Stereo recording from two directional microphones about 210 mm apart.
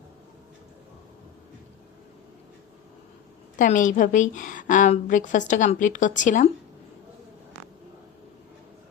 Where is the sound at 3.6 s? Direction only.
40° left (ahead or behind).